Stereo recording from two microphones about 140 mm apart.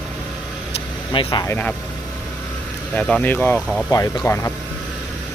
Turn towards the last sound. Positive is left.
turn(degrees=20)  # may be behind; listen again after turning